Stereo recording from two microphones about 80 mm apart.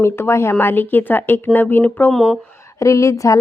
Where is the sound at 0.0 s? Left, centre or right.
Left.